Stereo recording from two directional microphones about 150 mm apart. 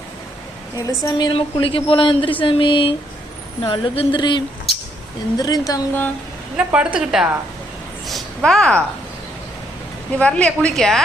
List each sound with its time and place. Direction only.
0.8 s a woman's voice: 25° left (ahead or behind)
6.6 s a woman's voice: 5° right (ahead or behind)
8.0 s a sound: centre (ahead or behind)
10.2 s a woman's voice: 10° left (ahead or behind)